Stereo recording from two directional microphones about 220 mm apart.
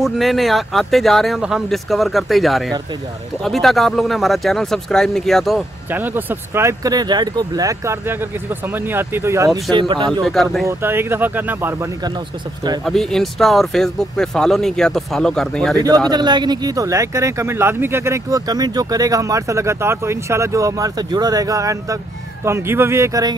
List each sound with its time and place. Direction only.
0.0 s speech: centre (ahead or behind); by 10.0 s 20° right (ahead or behind)
10.2 s speech: centre (ahead or behind)
10.8 s speech: 10° right (ahead or behind)
12.8 s speech: centre (ahead or behind)
16.1 s speech: 20° right (ahead or behind)